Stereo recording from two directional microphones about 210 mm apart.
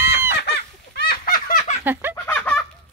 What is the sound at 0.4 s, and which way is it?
Fowl, 50° left (ahead or behind).